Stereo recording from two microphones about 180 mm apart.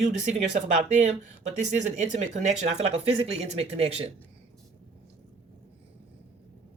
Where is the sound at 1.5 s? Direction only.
40° right (ahead or behind).